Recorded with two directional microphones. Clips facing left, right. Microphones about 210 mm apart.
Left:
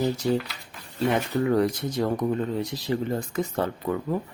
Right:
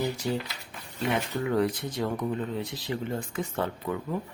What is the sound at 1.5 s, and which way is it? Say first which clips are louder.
Speech: left 2 dB; 40° left (ahead or behind).